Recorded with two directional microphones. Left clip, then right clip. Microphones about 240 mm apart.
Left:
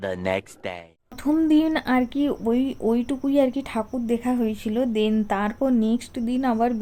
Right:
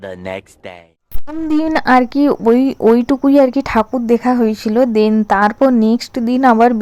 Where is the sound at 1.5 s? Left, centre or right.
Right.